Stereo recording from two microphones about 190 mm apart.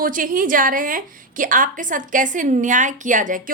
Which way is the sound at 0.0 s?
45° right (ahead or behind).